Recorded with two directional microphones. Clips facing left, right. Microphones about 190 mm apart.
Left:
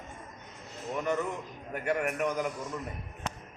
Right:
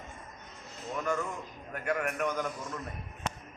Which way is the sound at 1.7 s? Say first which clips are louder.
Left 2 dB; 5° left (ahead or behind).